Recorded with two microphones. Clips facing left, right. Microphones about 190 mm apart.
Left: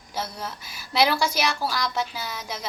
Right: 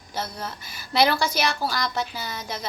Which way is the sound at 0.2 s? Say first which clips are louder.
Even; 5° left (ahead or behind).